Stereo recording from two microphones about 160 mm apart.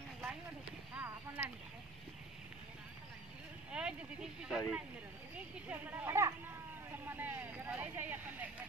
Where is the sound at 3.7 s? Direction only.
5° right (ahead or behind).